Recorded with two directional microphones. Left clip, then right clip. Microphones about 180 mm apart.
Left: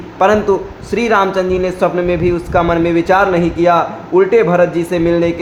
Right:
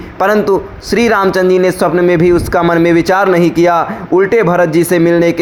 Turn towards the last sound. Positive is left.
turn(degrees=-35)  # may be behind; listen again after turning